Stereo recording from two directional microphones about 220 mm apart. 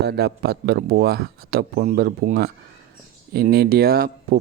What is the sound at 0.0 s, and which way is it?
Speech, 45° right (ahead or behind).